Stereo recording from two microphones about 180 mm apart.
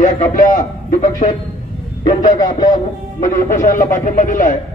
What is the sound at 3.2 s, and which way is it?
Speech, 45° left (ahead or behind).